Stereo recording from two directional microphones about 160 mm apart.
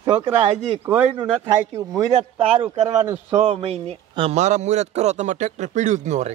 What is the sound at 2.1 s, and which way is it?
Speech, 45° right (ahead or behind).